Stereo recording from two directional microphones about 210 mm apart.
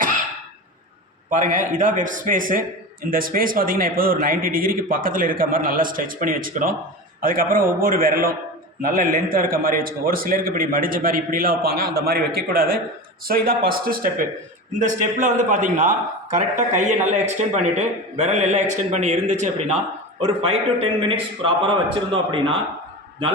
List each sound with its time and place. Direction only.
1.3 s a man's voice: 40° right (ahead or behind)